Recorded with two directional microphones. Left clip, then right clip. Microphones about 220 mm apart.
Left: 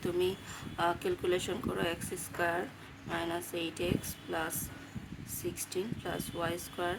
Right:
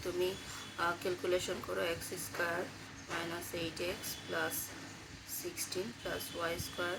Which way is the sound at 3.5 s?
50° left (ahead or behind).